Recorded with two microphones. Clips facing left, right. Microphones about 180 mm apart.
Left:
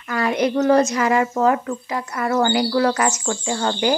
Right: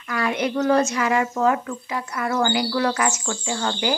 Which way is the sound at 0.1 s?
35° left (ahead or behind).